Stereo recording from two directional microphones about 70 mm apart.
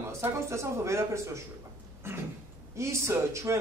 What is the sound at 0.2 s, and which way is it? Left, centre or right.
A man's voice, right.